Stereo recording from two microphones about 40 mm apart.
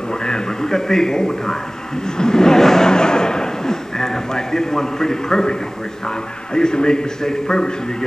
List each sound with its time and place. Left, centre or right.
0.1 s a man's voice: centre
2.0 s a sound: centre
6.0 s a man's voice: centre